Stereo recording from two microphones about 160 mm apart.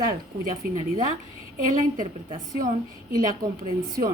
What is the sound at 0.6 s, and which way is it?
Speech, 65° right (ahead or behind).